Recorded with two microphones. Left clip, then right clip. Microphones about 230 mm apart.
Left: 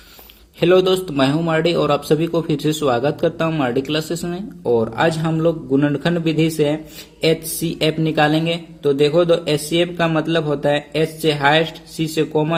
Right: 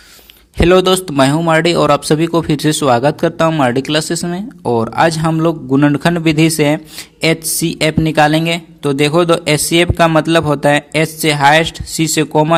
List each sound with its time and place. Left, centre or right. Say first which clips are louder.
0.6 s a man's voice: right 4 dB; right